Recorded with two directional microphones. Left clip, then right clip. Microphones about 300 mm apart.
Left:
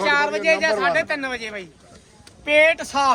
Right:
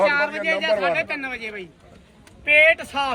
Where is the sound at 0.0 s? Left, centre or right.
Centre.